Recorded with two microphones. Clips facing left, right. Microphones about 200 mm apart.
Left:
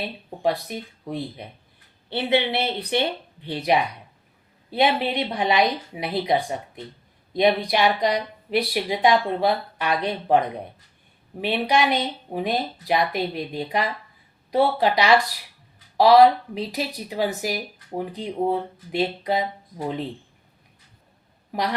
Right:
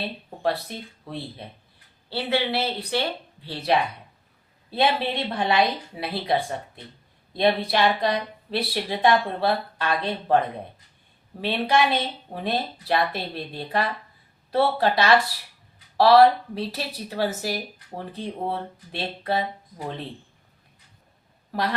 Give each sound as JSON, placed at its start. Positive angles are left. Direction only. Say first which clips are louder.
{"t": 0.0, "sound": "speech", "louder": "left 2 dB", "side_deg": 15}
{"t": 21.5, "sound": "speech", "louder": "left 1 dB", "side_deg": 15}